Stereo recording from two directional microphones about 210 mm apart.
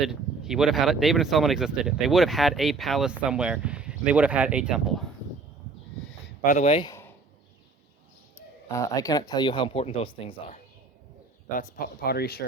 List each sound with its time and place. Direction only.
0.0 s speech: centre (ahead or behind)
6.4 s speech: 35° left (ahead or behind)
6.7 s speech: 15° left (ahead or behind)
8.7 s speech: 15° left (ahead or behind)
11.5 s speech: 45° left (ahead or behind)